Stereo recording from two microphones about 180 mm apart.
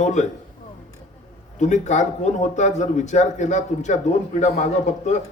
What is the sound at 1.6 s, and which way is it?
A man's voice, 40° left (ahead or behind).